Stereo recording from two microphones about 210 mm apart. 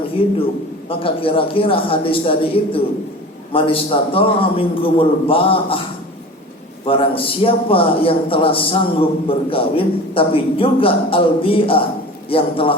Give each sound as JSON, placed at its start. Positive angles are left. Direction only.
{"t": 0.9, "sound": "a man's voice", "side_deg": 25}
{"t": 6.8, "sound": "a man's voice", "side_deg": 25}